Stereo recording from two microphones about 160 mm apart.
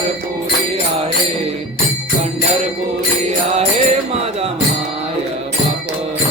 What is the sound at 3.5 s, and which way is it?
Music, 40° right (ahead or behind).